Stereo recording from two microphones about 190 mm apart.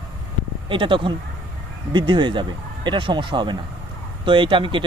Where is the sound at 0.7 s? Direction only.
25° right (ahead or behind).